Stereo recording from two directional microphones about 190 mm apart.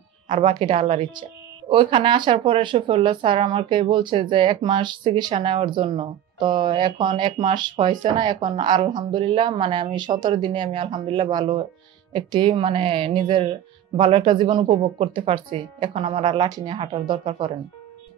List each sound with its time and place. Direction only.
0.3 s speech: 30° right (ahead or behind)